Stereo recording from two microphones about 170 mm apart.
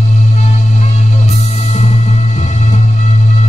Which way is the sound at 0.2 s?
40° left (ahead or behind).